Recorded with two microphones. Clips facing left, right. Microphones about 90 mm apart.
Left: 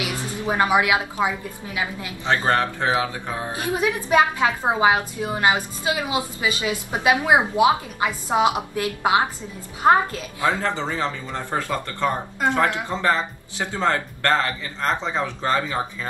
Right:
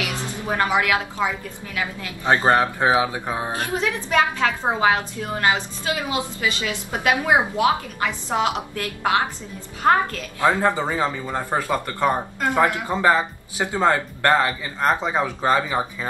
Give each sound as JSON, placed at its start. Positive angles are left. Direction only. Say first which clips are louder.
{"t": 0.5, "sound": "a woman's voice", "louder": "left 2 dB", "side_deg": 15}
{"t": 2.2, "sound": "speech", "louder": "right 3 dB", "side_deg": -20}
{"t": 3.5, "sound": "a woman's voice", "louder": "left 1 dB", "side_deg": 15}
{"t": 10.4, "sound": "speech", "louder": "right 4 dB", "side_deg": -15}